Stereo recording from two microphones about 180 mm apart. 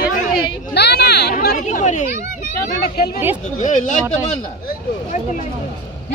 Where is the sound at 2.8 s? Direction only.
60° left (ahead or behind).